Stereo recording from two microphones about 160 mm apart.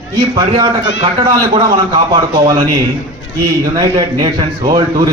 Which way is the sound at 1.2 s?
30° right (ahead or behind).